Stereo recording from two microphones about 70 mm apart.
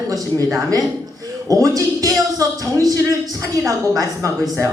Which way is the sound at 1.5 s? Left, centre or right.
Right.